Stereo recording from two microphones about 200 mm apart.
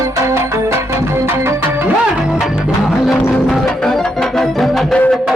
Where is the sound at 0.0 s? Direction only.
15° right (ahead or behind).